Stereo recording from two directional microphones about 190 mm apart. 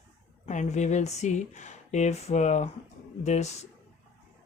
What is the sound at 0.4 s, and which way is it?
Speech, 40° left (ahead or behind).